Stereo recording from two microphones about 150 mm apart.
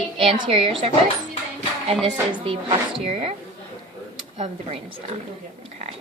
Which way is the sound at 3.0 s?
40° right (ahead or behind).